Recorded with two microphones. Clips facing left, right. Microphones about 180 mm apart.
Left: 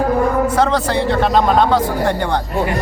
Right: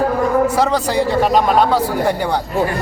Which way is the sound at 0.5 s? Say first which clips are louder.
Even; 10° right (ahead or behind).